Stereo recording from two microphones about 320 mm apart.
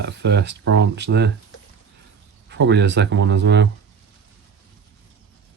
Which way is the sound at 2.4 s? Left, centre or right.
Right.